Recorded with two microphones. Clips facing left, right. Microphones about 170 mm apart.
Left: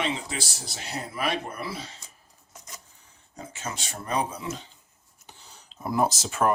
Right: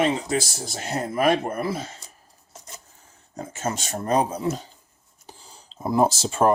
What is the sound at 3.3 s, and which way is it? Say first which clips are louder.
Speech: right 8 dB; 45° right (ahead or behind).